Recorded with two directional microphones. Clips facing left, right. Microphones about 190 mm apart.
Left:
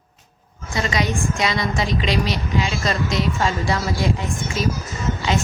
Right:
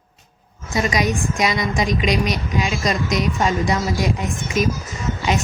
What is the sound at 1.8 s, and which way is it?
Speech, 30° left (ahead or behind).